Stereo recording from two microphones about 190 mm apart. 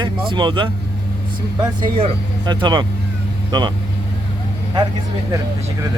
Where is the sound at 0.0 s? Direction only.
25° right (ahead or behind).